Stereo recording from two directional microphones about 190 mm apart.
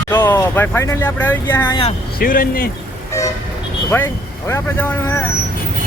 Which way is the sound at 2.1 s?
45° left (ahead or behind).